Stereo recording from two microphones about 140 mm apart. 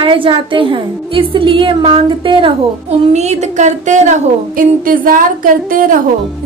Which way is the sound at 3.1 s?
55° right (ahead or behind).